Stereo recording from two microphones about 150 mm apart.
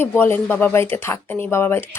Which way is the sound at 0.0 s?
15° left (ahead or behind).